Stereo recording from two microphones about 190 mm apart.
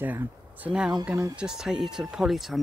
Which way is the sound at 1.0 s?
15° right (ahead or behind).